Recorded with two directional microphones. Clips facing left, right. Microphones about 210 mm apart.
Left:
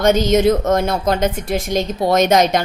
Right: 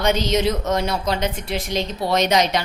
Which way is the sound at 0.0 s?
50° left (ahead or behind).